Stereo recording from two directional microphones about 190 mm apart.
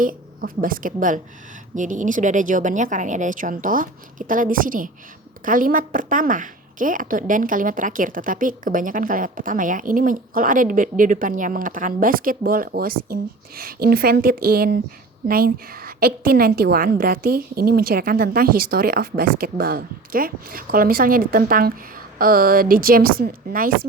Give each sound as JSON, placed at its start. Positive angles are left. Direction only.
{"t": 0.0, "sound": "a woman's voice", "side_deg": -45}